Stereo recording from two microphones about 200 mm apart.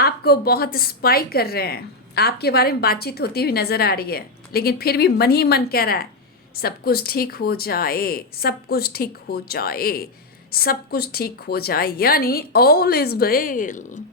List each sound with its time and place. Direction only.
0.0 s a woman's voice: 50° left (ahead or behind)